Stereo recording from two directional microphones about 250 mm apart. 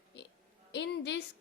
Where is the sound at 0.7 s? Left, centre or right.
Left.